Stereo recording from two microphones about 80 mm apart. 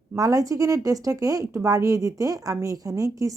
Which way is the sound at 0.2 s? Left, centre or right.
Right.